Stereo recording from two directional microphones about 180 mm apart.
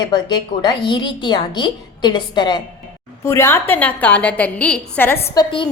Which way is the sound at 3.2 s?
15° left (ahead or behind).